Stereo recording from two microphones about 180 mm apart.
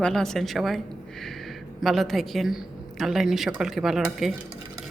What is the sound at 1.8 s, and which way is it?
Speech, centre (ahead or behind).